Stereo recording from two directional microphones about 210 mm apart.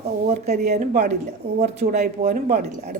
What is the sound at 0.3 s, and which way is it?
Speech, 30° right (ahead or behind).